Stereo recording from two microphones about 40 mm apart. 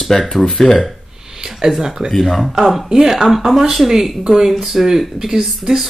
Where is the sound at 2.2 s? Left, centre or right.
Centre.